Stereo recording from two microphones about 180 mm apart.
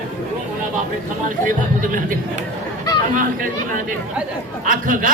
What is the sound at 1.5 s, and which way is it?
Speech, 50° right (ahead or behind).